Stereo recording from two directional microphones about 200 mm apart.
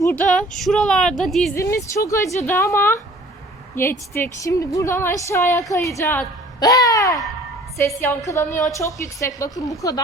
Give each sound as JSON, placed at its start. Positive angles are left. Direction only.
{"t": 0.0, "sound": "speech", "side_deg": 10}
{"t": 1.5, "sound": "a woman's voice", "side_deg": 15}
{"t": 8.4, "sound": "a woman's voice", "side_deg": 40}
{"t": 9.2, "sound": "a woman's voice", "side_deg": 15}